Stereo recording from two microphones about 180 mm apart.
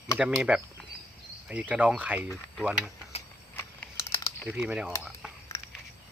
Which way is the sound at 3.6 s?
15° left (ahead or behind).